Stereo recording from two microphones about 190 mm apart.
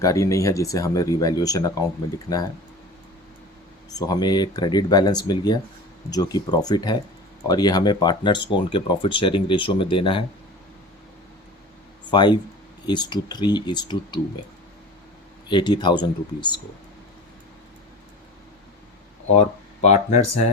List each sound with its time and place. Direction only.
0.0 s speech: 15° left (ahead or behind)
3.8 s speech: 20° left (ahead or behind)
12.1 s speech: 25° left (ahead or behind)
15.4 s speech: 25° left (ahead or behind)
19.3 s speech: 35° left (ahead or behind)